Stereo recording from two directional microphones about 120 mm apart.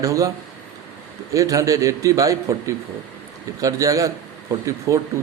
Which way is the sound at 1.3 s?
25° right (ahead or behind).